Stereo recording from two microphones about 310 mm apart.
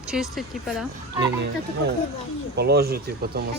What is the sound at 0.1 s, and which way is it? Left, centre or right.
Speech, centre.